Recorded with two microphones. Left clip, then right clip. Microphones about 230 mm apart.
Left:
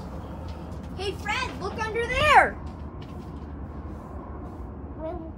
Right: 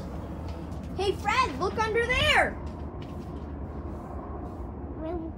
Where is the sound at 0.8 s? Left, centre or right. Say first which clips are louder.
Right 4 dB; centre.